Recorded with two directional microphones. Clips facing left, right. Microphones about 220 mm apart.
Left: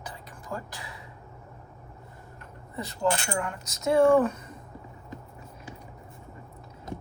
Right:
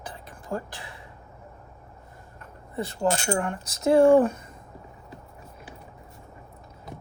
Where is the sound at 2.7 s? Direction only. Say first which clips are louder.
Right 2 dB; 30° right (ahead or behind).